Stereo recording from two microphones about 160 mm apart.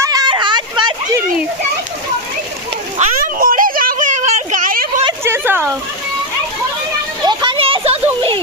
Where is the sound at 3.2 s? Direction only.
60° right (ahead or behind).